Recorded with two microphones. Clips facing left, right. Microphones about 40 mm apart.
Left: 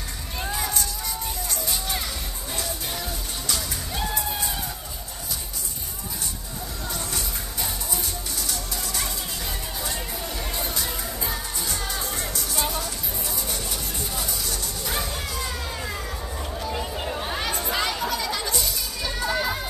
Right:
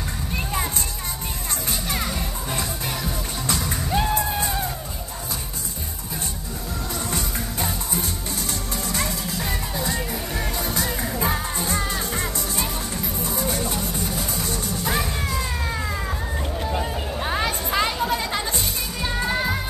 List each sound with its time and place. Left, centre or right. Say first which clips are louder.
0.5 s a sound: even; right
1.7 s music: right 4 dB; right
3.4 s music: right 5 dB; right
7.1 s music: right 4 dB; right
17.2 s music: right 7 dB; right